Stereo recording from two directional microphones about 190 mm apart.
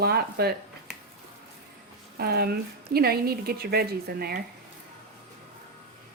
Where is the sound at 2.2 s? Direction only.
55° right (ahead or behind).